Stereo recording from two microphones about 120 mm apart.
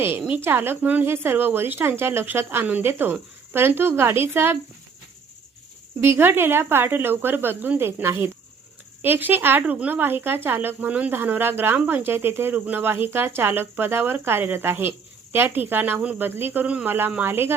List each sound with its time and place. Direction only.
0.2 s a woman's voice: 15° right (ahead or behind)
6.0 s a woman's voice: 20° right (ahead or behind)